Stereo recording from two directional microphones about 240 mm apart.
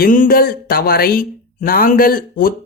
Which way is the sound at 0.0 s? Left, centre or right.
Left.